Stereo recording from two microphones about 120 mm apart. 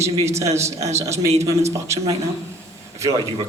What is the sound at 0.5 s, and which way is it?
Speech, 25° right (ahead or behind).